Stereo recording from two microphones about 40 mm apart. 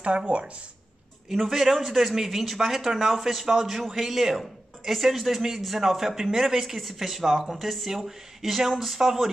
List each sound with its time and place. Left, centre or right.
0.3 s speech: right
1.3 s speech: centre